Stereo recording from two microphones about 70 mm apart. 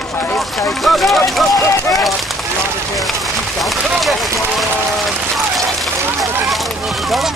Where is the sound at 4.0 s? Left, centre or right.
Centre.